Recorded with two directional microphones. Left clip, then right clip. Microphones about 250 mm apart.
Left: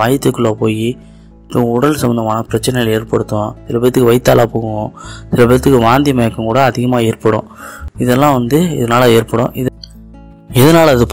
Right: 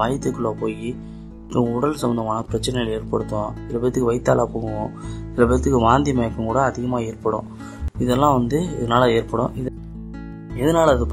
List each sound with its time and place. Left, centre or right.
0.0 s speech: centre
10.6 s speech: left